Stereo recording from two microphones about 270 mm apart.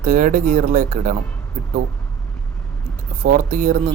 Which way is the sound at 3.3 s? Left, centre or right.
Right.